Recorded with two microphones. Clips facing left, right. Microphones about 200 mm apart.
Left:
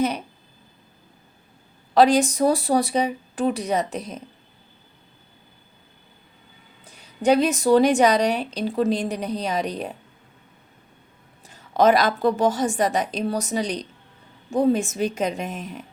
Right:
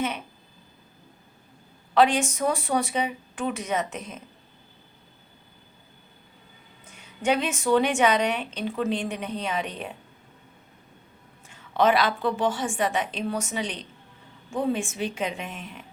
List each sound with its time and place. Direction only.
2.0 s a woman's voice: 40° left (ahead or behind)
6.8 s a woman's voice: 35° left (ahead or behind)
11.4 s a woman's voice: 40° left (ahead or behind)